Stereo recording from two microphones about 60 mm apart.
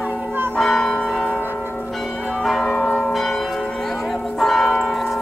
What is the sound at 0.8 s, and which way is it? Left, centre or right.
Church bell, centre.